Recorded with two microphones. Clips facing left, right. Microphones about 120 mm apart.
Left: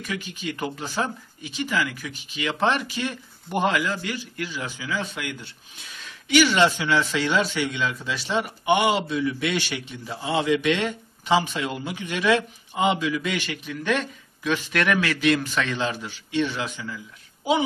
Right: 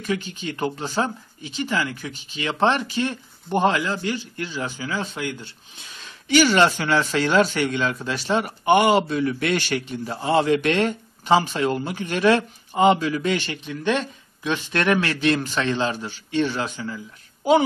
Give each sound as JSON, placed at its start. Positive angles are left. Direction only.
{"t": 0.0, "sound": "speech", "side_deg": -30}